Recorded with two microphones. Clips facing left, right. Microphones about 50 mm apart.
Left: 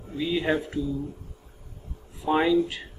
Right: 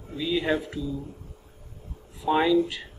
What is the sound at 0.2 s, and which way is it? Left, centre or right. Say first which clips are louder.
Speech: even; centre.